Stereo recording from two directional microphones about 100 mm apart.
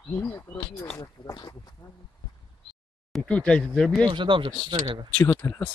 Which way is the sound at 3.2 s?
10° left (ahead or behind).